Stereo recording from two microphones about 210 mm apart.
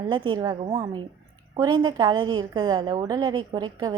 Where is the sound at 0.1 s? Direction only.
20° right (ahead or behind).